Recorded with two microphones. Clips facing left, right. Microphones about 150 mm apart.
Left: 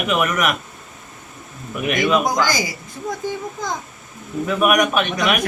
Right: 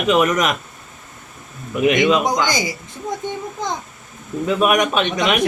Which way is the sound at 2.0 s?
20° right (ahead or behind).